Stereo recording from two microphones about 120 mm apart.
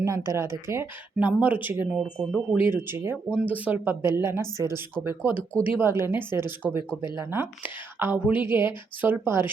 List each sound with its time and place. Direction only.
0.3 s a woman's voice: 20° right (ahead or behind)
1.3 s a woman's voice: 10° right (ahead or behind)
6.6 s a woman's voice: 5° right (ahead or behind)
7.3 s a woman's voice: 15° right (ahead or behind)